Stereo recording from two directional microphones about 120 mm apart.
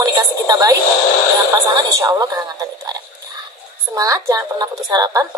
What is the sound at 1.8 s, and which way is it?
Speech, 30° right (ahead or behind).